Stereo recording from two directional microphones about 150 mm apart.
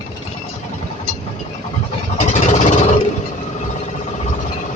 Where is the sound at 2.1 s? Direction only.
50° left (ahead or behind).